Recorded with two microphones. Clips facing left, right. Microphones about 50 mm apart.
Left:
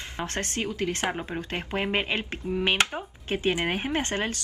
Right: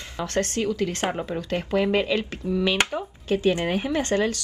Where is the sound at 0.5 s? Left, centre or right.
Left.